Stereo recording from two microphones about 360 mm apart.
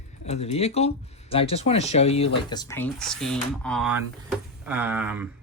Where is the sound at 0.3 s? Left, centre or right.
Centre.